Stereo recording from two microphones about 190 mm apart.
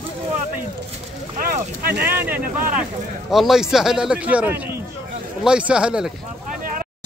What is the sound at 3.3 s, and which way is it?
A man's voice, centre (ahead or behind).